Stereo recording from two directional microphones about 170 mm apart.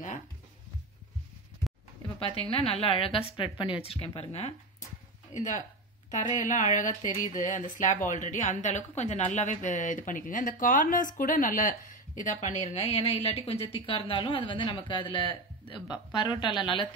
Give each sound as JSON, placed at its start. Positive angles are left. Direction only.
{"t": 2.1, "sound": "a woman's voice", "side_deg": 35}